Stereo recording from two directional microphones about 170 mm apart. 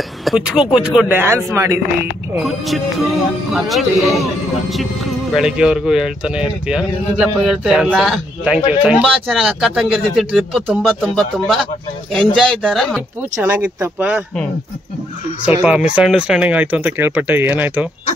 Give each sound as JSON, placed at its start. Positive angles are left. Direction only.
{"t": 0.2, "sound": "speech", "side_deg": -5}
{"t": 2.4, "sound": "speech", "side_deg": 0}
{"t": 13.4, "sound": "speech", "side_deg": -10}
{"t": 15.4, "sound": "speech", "side_deg": -5}